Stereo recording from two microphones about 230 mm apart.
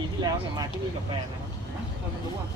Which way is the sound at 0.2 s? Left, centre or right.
Centre.